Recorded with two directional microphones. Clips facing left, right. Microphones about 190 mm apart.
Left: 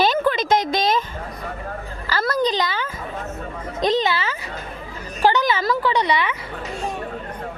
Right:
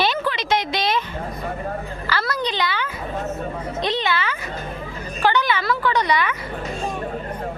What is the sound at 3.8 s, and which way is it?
Speech, 45° left (ahead or behind).